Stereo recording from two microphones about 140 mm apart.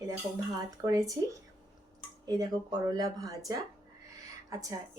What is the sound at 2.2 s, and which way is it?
A woman's voice, 25° right (ahead or behind).